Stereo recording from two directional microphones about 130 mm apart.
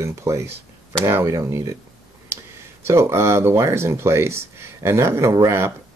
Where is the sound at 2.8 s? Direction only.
20° right (ahead or behind).